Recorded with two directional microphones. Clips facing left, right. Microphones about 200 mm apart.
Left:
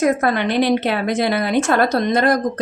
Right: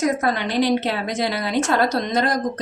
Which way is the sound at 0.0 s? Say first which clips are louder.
Left 4 dB; 60° left (ahead or behind).